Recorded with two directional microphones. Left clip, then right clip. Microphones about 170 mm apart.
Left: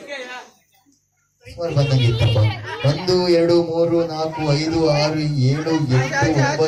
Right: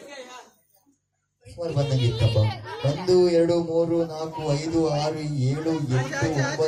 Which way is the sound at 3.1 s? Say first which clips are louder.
Left 3 dB; 60° right (ahead or behind).